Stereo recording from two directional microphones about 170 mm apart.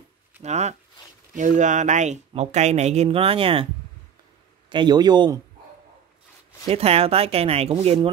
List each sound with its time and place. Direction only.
0.4 s speech: 40° right (ahead or behind)
4.6 s a man's voice: 25° right (ahead or behind)
6.7 s speech: 35° right (ahead or behind)